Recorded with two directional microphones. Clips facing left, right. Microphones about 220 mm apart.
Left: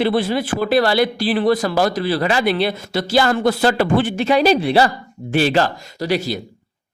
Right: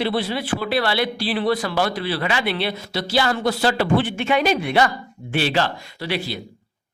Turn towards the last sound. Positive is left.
turn(degrees=45)  # may be behind; listen again after turning